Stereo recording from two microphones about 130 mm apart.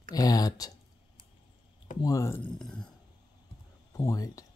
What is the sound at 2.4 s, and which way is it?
Speech, 5° left (ahead or behind).